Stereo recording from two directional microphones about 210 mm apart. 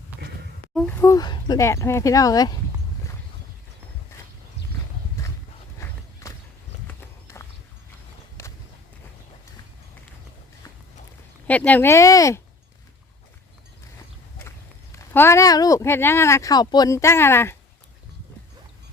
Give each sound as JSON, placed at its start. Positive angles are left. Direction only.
{"t": 0.7, "sound": "speech", "side_deg": 5}
{"t": 5.2, "sound": "horse", "side_deg": 15}
{"t": 8.4, "sound": "walk", "side_deg": 10}
{"t": 11.4, "sound": "speech", "side_deg": 5}
{"t": 14.9, "sound": "speech", "side_deg": 10}